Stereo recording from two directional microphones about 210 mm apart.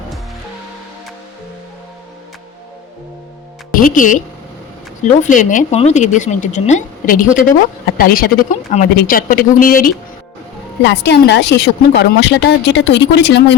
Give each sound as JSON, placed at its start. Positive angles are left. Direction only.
{"t": 3.7, "sound": "speech", "side_deg": 40}
{"t": 5.2, "sound": "a woman's voice", "side_deg": 35}
{"t": 10.8, "sound": "a woman's voice", "side_deg": 55}